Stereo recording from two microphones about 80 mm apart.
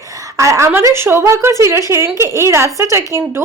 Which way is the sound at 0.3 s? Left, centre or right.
Right.